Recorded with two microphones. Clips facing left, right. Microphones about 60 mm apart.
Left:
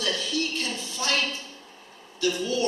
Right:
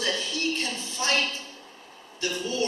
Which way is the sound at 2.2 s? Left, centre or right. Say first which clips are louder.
Left 3 dB; right.